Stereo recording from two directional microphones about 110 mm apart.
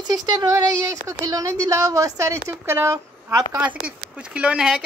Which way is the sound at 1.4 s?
30° right (ahead or behind).